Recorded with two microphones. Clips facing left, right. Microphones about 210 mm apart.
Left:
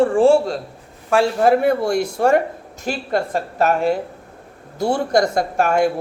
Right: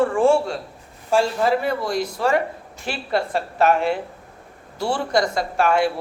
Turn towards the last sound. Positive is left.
turn(degrees=45)  # may be behind; listen again after turning